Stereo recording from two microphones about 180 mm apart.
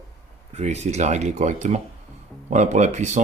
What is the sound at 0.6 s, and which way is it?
Speech, 40° right (ahead or behind).